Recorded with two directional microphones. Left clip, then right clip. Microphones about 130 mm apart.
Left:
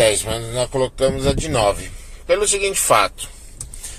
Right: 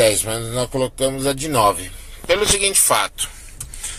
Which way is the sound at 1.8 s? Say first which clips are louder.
Right 2 dB; 15° right (ahead or behind).